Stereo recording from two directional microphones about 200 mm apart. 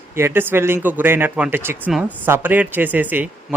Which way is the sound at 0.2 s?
10° right (ahead or behind).